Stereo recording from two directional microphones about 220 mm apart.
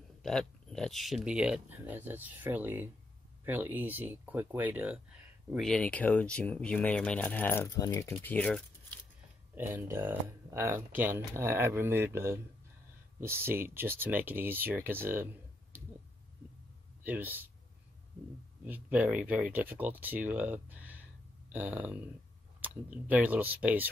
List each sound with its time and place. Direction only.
0.2 s speech: centre (ahead or behind)
9.6 s speech: 10° right (ahead or behind)
17.0 s speech: 10° right (ahead or behind)
18.7 s speech: 5° right (ahead or behind)